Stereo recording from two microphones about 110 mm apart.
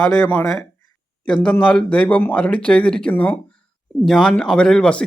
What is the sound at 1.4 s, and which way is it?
A man's voice, 5° left (ahead or behind).